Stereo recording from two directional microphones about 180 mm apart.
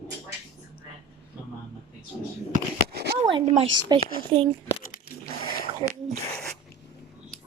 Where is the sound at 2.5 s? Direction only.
65° right (ahead or behind).